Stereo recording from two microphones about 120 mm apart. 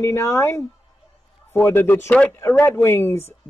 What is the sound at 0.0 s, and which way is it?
Speech, 20° left (ahead or behind).